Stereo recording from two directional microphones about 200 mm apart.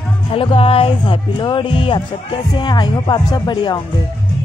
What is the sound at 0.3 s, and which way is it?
Speech, 30° left (ahead or behind).